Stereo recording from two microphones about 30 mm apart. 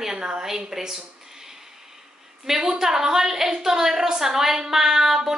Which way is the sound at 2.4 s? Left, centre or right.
Centre.